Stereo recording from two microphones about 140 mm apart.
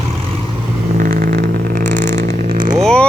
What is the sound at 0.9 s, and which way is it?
Vehicle, 85° right.